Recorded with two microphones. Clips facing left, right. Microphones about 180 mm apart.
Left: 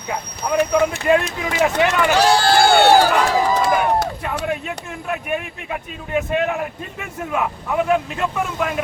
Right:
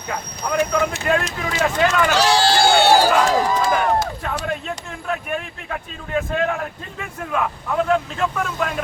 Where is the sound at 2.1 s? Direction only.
50° left (ahead or behind).